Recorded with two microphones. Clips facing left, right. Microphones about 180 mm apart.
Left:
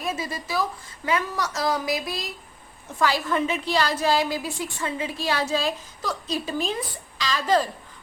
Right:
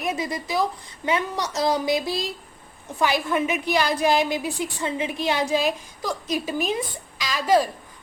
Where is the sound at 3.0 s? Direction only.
15° right (ahead or behind).